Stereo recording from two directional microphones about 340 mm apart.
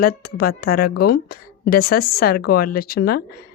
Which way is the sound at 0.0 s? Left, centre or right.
Left.